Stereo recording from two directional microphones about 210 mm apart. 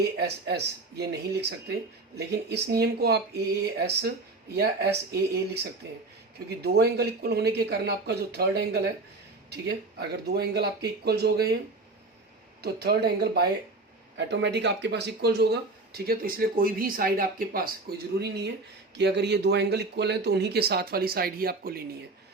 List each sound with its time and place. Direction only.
0.2 s speech: 50° right (ahead or behind)
6.6 s speech: 50° right (ahead or behind)
12.6 s speech: 50° right (ahead or behind)